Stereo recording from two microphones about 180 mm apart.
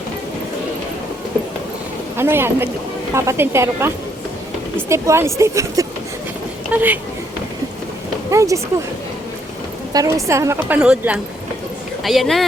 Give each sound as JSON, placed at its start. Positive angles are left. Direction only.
{"t": 2.1, "sound": "speech", "side_deg": -15}
{"t": 8.3, "sound": "speech", "side_deg": -15}
{"t": 9.9, "sound": "speech", "side_deg": -20}